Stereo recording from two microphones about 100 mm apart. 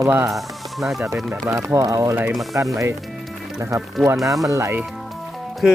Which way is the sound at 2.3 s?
Centre (ahead or behind).